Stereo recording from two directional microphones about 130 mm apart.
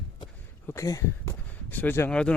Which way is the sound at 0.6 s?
25° left (ahead or behind).